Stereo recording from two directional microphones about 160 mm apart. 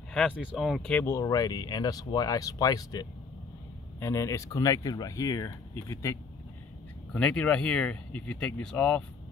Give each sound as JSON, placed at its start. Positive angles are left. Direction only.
{"t": 0.1, "sound": "speech", "side_deg": -5}
{"t": 1.2, "sound": "speech", "side_deg": 25}
{"t": 7.1, "sound": "speech", "side_deg": 5}